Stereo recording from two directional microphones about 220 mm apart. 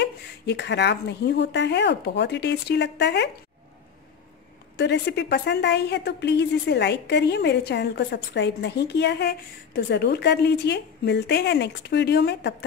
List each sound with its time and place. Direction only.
0.0 s a woman's voice: 50° left (ahead or behind)
4.7 s a woman's voice: 50° left (ahead or behind)